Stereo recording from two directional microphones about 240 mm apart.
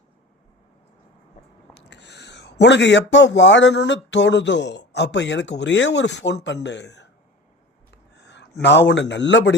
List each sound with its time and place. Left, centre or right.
1.8 s speech: left
8.1 s a sound: left
8.6 s speech: left